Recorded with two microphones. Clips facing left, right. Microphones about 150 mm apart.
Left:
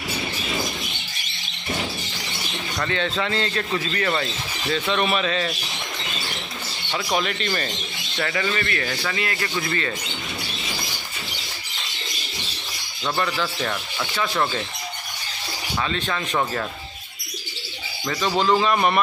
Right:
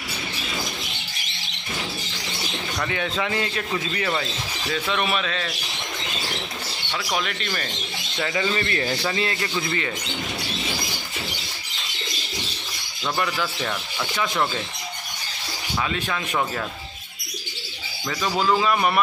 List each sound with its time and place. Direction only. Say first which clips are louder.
2.8 s speech: left 2 dB; 10° right (ahead or behind)
6.9 s a man's voice: left 3 dB; 5° left (ahead or behind)
8.2 s a man's voice: even; 15° right (ahead or behind)
13.0 s a man's voice: left 1 dB; 5° right (ahead or behind)
14.1 s speech: left 1 dB; 15° right (ahead or behind)
18.0 s a man's voice: left 2 dB; centre (ahead or behind)